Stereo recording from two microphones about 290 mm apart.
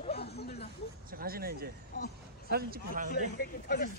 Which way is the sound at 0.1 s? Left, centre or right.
Left.